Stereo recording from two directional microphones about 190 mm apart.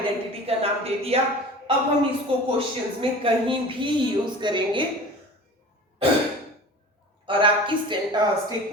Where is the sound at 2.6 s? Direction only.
30° right (ahead or behind).